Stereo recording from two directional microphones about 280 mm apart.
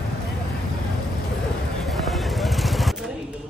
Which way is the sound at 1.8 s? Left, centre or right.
Centre.